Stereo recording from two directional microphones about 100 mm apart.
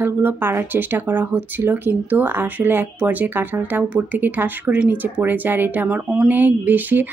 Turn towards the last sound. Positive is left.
turn(degrees=-20)  # may be behind; listen again after turning